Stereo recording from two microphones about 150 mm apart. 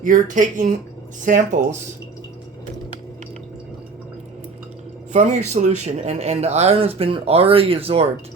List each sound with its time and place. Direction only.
0.0 s speech: 60° right (ahead or behind)
5.1 s speech: 50° right (ahead or behind)